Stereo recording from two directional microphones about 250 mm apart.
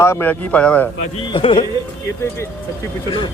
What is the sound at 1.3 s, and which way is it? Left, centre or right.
Speech, centre.